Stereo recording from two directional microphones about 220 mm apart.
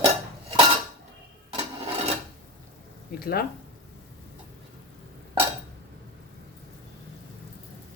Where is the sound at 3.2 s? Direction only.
45° left (ahead or behind).